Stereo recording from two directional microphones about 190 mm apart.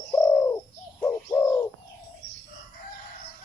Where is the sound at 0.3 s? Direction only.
15° left (ahead or behind).